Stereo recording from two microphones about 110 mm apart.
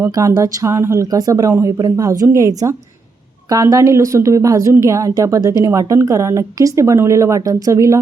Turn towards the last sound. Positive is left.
turn(degrees=-30)  # may be behind; listen again after turning